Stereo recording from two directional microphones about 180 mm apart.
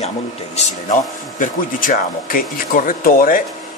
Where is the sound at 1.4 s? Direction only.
50° left (ahead or behind).